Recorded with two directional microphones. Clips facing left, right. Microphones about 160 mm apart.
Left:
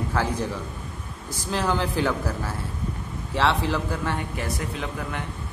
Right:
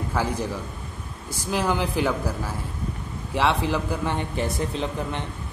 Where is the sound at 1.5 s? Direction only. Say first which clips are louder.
Right 1 dB; 15° right (ahead or behind).